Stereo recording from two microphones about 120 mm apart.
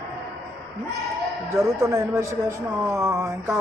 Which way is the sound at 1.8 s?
25° right (ahead or behind).